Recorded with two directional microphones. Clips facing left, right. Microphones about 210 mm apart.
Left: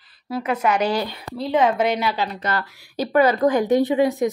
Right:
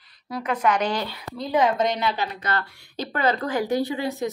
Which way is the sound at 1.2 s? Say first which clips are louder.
Left 2 dB; 30° left (ahead or behind).